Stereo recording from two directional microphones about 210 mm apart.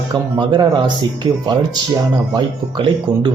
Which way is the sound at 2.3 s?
20° right (ahead or behind).